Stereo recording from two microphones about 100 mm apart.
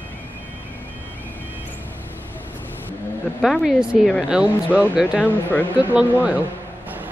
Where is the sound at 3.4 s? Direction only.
Centre (ahead or behind).